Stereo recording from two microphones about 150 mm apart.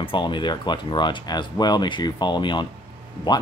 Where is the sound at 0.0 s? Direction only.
35° left (ahead or behind).